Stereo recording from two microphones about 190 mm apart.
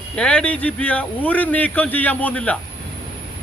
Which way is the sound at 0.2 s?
5° left (ahead or behind).